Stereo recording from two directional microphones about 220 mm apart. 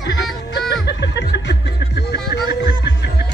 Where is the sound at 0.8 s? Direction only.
50° left (ahead or behind).